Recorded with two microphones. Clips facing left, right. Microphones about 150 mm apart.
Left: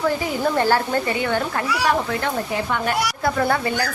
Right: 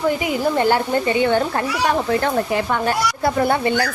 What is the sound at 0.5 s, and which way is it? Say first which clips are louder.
Speech: right 1 dB; 20° right (ahead or behind).